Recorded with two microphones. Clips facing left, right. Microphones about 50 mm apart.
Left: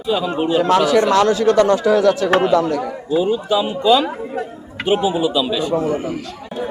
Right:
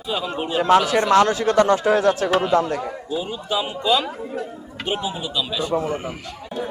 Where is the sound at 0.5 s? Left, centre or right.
Right.